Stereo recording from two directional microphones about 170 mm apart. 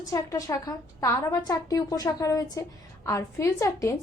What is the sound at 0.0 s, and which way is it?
A woman's voice, 20° left (ahead or behind).